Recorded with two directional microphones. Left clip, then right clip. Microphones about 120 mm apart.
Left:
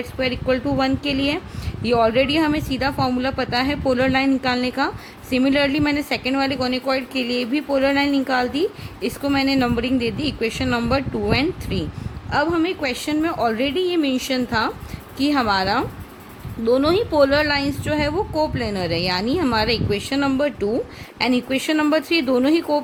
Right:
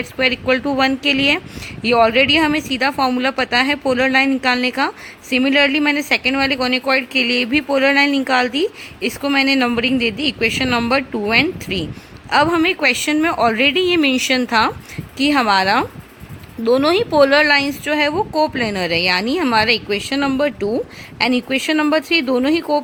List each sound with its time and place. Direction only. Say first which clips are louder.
0.2 s a woman's voice: right 5 dB; 30° right (ahead or behind)